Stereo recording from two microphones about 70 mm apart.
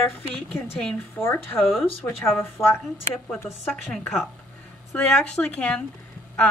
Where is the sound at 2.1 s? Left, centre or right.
Left.